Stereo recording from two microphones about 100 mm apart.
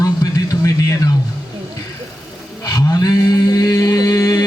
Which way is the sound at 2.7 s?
40° left (ahead or behind).